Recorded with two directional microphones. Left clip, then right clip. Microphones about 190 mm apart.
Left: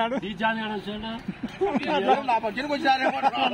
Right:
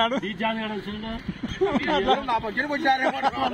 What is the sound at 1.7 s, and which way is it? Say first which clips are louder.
A man's voice: even; centre (ahead or behind).